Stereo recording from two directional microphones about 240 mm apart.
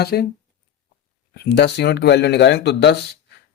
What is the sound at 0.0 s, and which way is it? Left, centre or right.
Speech, left.